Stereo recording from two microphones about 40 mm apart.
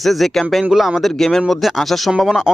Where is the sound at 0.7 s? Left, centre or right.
Centre.